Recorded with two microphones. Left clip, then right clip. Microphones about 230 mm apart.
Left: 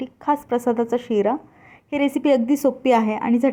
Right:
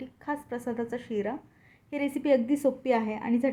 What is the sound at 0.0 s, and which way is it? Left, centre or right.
A woman's voice, left.